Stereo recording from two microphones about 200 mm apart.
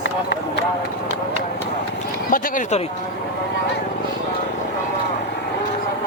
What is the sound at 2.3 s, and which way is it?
Speech, 35° left (ahead or behind).